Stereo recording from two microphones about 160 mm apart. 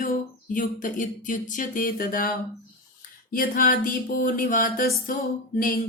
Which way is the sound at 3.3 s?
65° left (ahead or behind).